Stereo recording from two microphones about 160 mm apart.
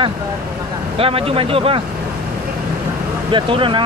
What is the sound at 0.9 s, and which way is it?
Speech, 35° right (ahead or behind).